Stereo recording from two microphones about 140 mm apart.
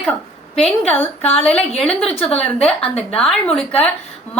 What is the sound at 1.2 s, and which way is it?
Speech, 50° left (ahead or behind).